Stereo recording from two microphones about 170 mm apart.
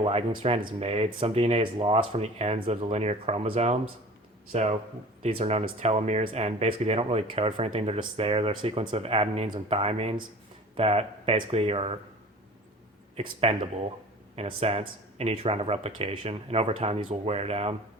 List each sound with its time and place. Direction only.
0.0 s speech: 35° right (ahead or behind)
13.4 s speech: 35° right (ahead or behind)